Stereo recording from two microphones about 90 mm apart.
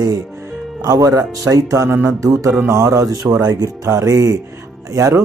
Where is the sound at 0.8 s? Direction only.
45° right (ahead or behind).